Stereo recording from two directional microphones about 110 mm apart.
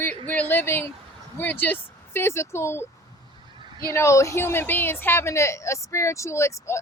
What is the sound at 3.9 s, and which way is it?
A woman's voice, 25° left (ahead or behind).